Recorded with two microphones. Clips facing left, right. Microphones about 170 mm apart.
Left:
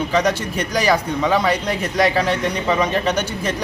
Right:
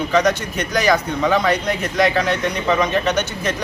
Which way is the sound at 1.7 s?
35° left (ahead or behind).